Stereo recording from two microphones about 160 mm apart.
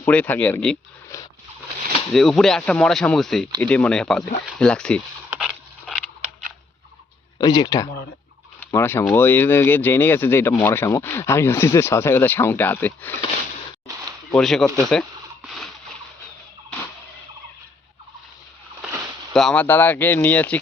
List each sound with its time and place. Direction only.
0.0 s speech: 10° left (ahead or behind)
1.1 s a sound: 20° left (ahead or behind)
2.1 s speech: centre (ahead or behind)
5.4 s a sound: centre (ahead or behind)
7.3 s speech: 25° left (ahead or behind)
14.3 s speech: centre (ahead or behind)
15.4 s a sound: centre (ahead or behind)
18.8 s rowboat: 10° right (ahead or behind)
19.3 s speech: centre (ahead or behind)
19.6 s speech: 15° left (ahead or behind)